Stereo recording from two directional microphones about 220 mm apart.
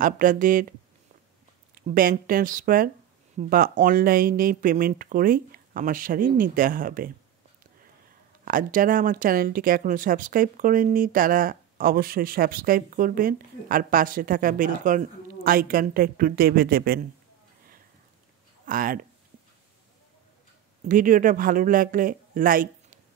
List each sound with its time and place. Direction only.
0.0 s speech: 40° right (ahead or behind)
1.8 s speech: 40° right (ahead or behind)
8.5 s speech: 40° right (ahead or behind)
18.7 s speech: 40° right (ahead or behind)
20.9 s speech: 35° right (ahead or behind)